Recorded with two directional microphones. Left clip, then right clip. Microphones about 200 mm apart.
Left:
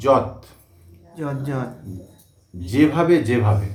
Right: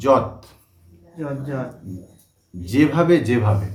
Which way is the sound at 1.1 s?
50° left (ahead or behind).